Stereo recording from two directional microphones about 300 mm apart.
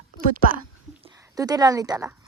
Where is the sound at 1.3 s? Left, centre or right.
Centre.